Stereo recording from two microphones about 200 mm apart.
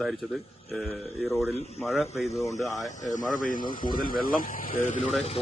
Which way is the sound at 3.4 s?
40° left (ahead or behind).